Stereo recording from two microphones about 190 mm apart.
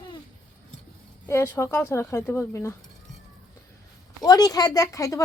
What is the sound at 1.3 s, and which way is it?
A woman's voice, 15° left (ahead or behind).